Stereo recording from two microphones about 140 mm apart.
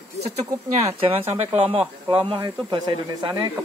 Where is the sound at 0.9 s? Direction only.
50° right (ahead or behind).